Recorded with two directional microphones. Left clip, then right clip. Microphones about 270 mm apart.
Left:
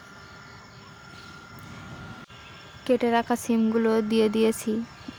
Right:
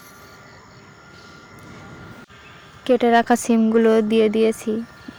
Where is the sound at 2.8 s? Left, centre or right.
Centre.